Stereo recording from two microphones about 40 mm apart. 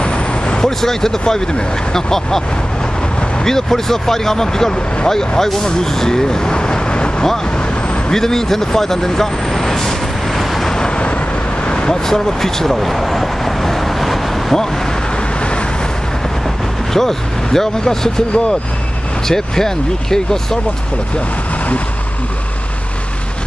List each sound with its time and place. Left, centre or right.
0.0 s vehicle: left
0.7 s speech: centre
3.4 s speech: centre
8.1 s vehicle: centre
11.6 s vehicle: left
12.1 s vehicle: centre
16.9 s speech: centre